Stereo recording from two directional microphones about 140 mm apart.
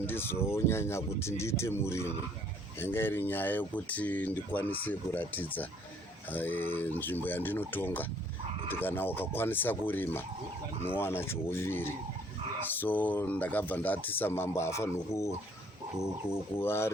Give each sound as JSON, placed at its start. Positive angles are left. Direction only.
{"t": 0.0, "sound": "speech", "side_deg": 15}
{"t": 16.6, "sound": "speech", "side_deg": 15}